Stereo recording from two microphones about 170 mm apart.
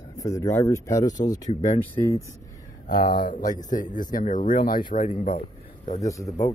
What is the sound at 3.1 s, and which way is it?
Speech, 55° left (ahead or behind).